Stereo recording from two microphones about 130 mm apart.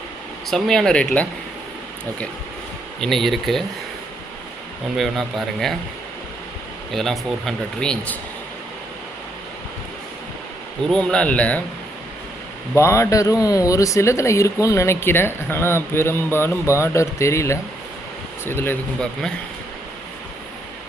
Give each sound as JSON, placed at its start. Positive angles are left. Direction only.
{"t": 0.5, "sound": "speech", "side_deg": 5}
{"t": 3.0, "sound": "speech", "side_deg": 0}
{"t": 4.9, "sound": "speech", "side_deg": 0}
{"t": 6.9, "sound": "speech", "side_deg": 0}
{"t": 10.8, "sound": "speech", "side_deg": 5}
{"t": 12.7, "sound": "speech", "side_deg": 20}